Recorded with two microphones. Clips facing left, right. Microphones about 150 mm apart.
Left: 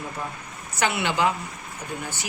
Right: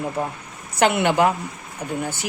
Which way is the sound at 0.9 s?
55° right (ahead or behind).